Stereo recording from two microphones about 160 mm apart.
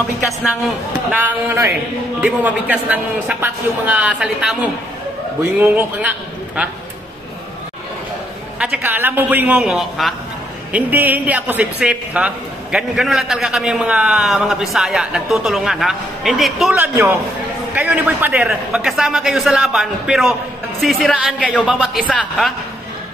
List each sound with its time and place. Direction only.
1.1 s a man's voice: 10° right (ahead or behind)
5.6 s a man's voice: 10° right (ahead or behind)
8.5 s a man's voice: 5° right (ahead or behind)
10.7 s a man's voice: 10° right (ahead or behind)
16.7 s a man's voice: 10° right (ahead or behind)
22.0 s a man's voice: 5° left (ahead or behind)